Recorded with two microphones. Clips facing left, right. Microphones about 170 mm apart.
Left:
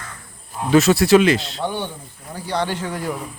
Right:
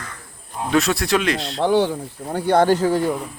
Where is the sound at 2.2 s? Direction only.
60° right (ahead or behind); by 3.1 s 30° right (ahead or behind).